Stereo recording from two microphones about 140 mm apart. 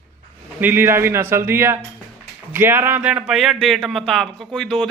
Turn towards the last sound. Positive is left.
turn(degrees=5)  # may be behind; listen again after turning